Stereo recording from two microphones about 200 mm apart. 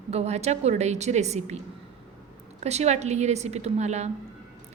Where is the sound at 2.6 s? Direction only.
35° right (ahead or behind).